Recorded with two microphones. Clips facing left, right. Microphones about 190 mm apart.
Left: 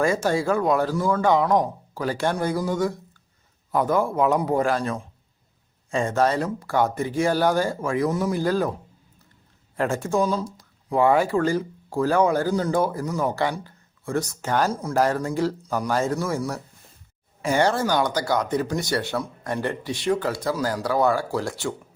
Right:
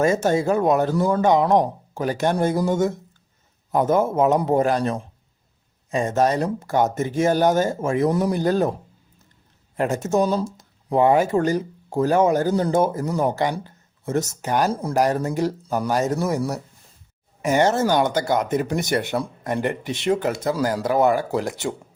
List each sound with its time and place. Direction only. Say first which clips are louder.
0.0 s speech: right 3 dB; 25° right (ahead or behind)
9.7 s speech: right 2 dB; 20° right (ahead or behind)
14.7 s speech: right 3 dB; 30° right (ahead or behind)
14.9 s speech: right 1 dB; 20° right (ahead or behind)